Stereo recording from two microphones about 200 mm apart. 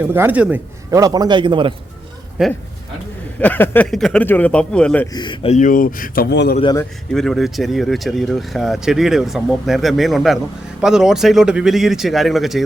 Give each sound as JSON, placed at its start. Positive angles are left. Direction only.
{"t": 0.1, "sound": "a man's voice", "side_deg": -10}
{"t": 2.4, "sound": "speech", "side_deg": -5}
{"t": 3.4, "sound": "speech", "side_deg": 10}
{"t": 5.1, "sound": "speech", "side_deg": 25}
{"t": 6.3, "sound": "a man's voice", "side_deg": 55}
{"t": 6.7, "sound": "speech", "side_deg": 5}